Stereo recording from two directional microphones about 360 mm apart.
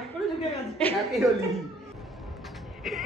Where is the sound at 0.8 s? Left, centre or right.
Centre.